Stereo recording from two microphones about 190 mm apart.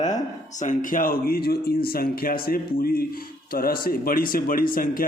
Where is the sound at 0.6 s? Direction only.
40° left (ahead or behind).